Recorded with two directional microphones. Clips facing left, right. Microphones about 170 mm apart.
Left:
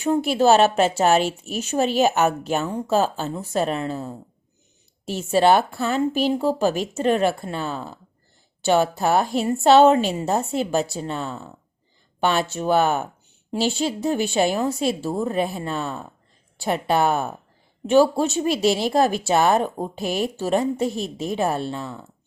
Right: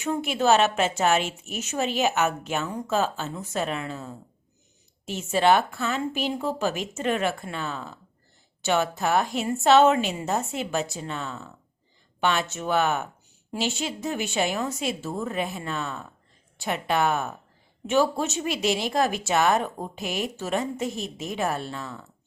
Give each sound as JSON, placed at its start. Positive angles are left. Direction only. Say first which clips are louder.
{"t": 0.0, "sound": "a woman's voice", "louder": "left 6 dB", "side_deg": 35}